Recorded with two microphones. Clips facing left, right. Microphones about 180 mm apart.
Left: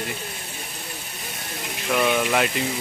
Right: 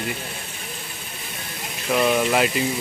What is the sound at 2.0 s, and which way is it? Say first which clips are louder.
Speech: right 2 dB; centre (ahead or behind).